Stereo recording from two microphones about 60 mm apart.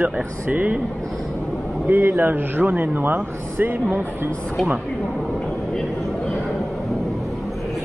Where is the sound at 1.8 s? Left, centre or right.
Right.